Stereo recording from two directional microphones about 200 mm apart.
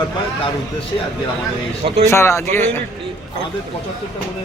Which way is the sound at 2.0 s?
15° left (ahead or behind).